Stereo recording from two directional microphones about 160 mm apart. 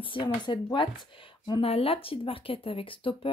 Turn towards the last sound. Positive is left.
turn(degrees=35)  # may be behind; listen again after turning